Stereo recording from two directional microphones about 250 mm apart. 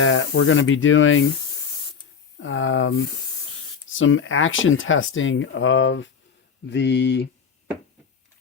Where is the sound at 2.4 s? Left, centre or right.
Left.